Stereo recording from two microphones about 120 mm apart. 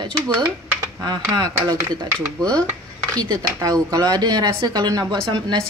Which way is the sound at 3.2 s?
30° right (ahead or behind).